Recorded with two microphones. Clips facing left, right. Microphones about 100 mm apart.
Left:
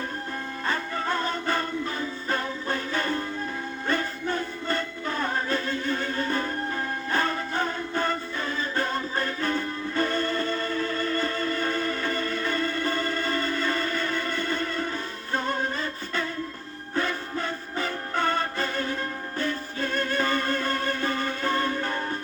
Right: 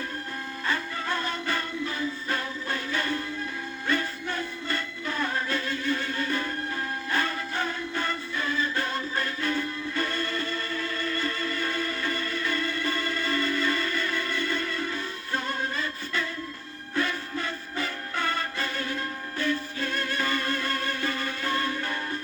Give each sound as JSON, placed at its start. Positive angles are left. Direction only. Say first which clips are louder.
{"t": 0.7, "sound": "music", "louder": "left 2 dB", "side_deg": 40}